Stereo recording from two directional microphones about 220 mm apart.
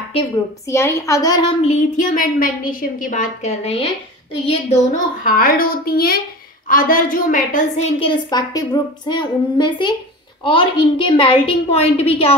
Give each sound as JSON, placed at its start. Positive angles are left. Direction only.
{"t": 0.1, "sound": "a woman's voice", "side_deg": 15}
{"t": 1.6, "sound": "a woman's voice", "side_deg": 30}
{"t": 5.2, "sound": "a woman's voice", "side_deg": 40}